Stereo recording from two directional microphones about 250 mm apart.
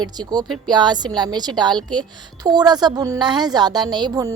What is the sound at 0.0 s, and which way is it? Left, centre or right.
A woman's voice, centre.